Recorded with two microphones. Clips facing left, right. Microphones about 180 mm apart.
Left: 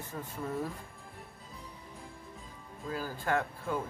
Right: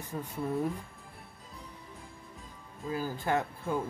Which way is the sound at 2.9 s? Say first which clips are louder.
Right 2 dB; 20° right (ahead or behind).